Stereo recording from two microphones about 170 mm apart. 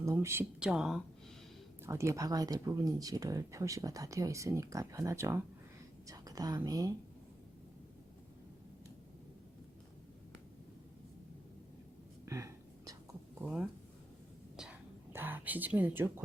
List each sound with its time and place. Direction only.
0.0 s speech: 15° right (ahead or behind)
1.8 s speech: 15° right (ahead or behind)
12.2 s whispering: 15° right (ahead or behind)
13.4 s speech: 10° right (ahead or behind)
14.5 s whispering: 5° right (ahead or behind)